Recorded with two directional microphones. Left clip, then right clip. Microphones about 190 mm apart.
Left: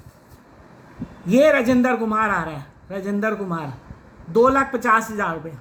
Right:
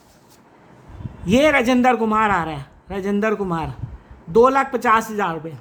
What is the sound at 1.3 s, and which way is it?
A man's voice, 45° right (ahead or behind).